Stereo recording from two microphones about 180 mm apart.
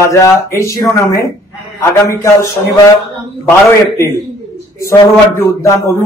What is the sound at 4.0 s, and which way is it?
Speech, 15° left (ahead or behind).